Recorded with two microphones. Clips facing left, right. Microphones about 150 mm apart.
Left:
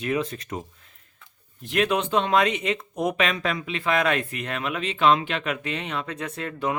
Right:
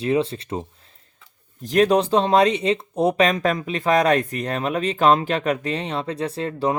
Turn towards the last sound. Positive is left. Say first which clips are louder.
# right 5 dB
turn(degrees=-30)  # may be behind; listen again after turning